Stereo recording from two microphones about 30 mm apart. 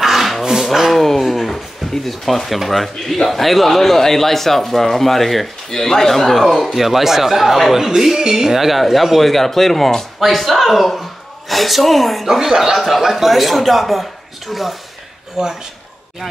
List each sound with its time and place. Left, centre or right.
0.0 s a sound: centre
0.7 s speech: centre
1.8 s a sound: centre
2.4 s a man's voice: centre
6.6 s speech: centre
12.3 s speech: centre